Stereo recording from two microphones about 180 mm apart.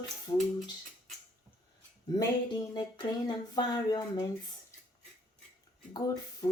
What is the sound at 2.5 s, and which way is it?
Speech, 25° left (ahead or behind).